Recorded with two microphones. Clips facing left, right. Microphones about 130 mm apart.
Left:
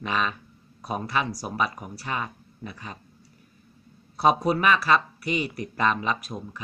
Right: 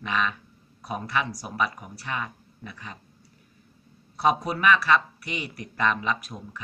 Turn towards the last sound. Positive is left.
turn(degrees=30)  # may be behind; listen again after turning